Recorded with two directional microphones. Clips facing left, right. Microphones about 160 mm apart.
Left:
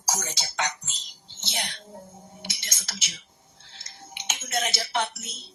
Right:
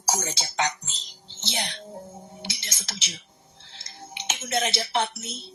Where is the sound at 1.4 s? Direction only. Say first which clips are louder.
Right 3 dB; 30° right (ahead or behind).